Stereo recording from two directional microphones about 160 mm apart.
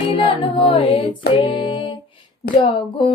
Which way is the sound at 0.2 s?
35° left (ahead or behind).